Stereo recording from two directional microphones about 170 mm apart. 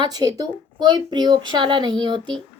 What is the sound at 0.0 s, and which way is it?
Speech, 25° right (ahead or behind).